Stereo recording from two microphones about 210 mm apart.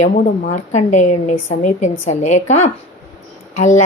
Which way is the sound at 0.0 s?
35° left (ahead or behind).